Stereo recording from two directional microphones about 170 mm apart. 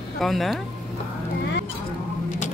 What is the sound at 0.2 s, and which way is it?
Speech, centre (ahead or behind).